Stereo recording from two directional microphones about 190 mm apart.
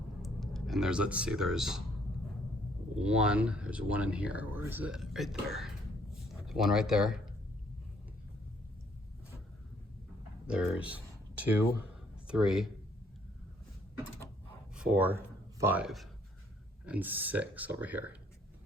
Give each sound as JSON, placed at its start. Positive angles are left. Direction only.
{"t": 0.2, "sound": "speech", "side_deg": 0}
{"t": 3.0, "sound": "speech", "side_deg": -5}
{"t": 10.4, "sound": "speech", "side_deg": -5}
{"t": 14.8, "sound": "speech", "side_deg": -5}